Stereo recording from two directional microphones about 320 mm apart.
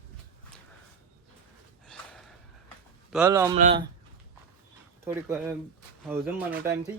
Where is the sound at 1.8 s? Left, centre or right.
Centre.